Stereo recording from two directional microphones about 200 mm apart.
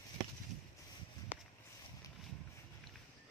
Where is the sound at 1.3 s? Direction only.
10° right (ahead or behind).